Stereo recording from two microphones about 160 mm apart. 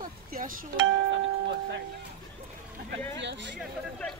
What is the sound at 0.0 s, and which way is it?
Cowbell, 60° right (ahead or behind).